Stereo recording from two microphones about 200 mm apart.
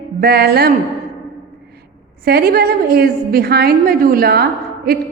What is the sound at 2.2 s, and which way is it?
A woman's voice, 50° right (ahead or behind).